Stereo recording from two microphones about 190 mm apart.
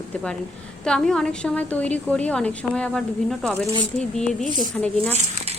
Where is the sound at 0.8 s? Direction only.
5° left (ahead or behind).